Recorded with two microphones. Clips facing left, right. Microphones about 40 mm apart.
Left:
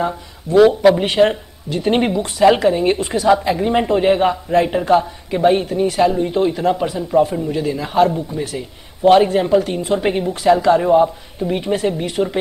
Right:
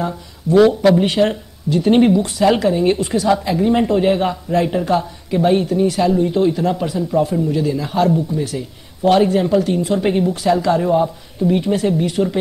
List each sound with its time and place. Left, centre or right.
0.0 s speech: centre